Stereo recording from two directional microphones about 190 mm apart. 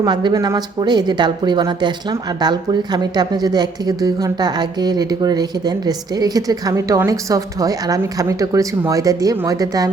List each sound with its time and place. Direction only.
0.0 s speech: 25° right (ahead or behind)